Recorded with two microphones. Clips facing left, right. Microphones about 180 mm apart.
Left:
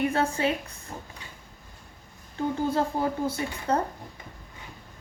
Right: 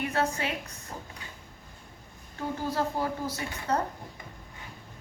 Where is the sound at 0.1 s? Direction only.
30° left (ahead or behind).